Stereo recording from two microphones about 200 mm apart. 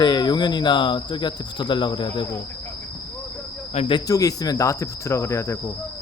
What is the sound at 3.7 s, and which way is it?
Speech, 25° left (ahead or behind).